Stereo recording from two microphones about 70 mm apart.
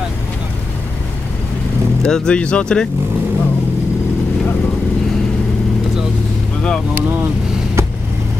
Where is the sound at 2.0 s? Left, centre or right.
Centre.